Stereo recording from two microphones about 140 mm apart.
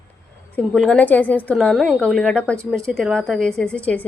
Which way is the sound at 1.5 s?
Centre (ahead or behind).